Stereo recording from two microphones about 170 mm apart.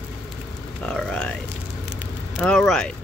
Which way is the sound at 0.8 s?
5° left (ahead or behind).